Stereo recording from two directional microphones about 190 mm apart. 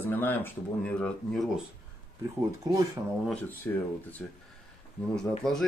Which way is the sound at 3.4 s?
10° left (ahead or behind).